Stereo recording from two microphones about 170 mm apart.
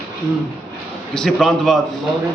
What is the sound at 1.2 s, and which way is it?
Speech, centre (ahead or behind).